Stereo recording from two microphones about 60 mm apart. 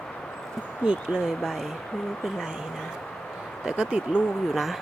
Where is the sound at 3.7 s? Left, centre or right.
Centre.